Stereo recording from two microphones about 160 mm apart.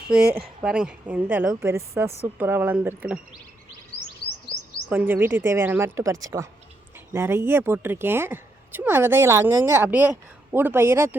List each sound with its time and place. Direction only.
0.1 s speech: 5° right (ahead or behind)
4.9 s speech: 10° right (ahead or behind)